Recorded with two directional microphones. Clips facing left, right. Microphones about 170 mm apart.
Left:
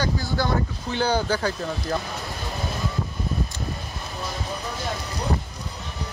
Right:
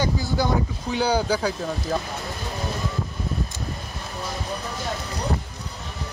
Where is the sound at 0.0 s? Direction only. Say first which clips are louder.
Right 1 dB; 20° right (ahead or behind).